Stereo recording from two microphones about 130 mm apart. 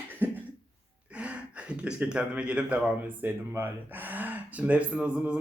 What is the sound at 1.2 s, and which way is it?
Speech, 10° right (ahead or behind).